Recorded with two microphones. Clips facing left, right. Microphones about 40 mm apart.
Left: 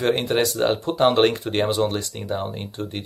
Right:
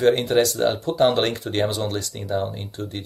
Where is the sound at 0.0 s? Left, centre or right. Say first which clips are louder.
Right 3 dB; centre.